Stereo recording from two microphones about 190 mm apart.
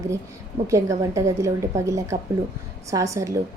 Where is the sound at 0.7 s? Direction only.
15° right (ahead or behind).